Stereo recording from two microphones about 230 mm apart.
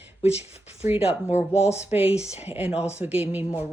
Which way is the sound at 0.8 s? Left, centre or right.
Centre.